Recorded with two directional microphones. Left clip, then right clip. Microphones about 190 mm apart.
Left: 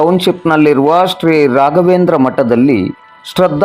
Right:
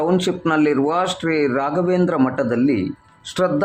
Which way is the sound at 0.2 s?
30° left (ahead or behind).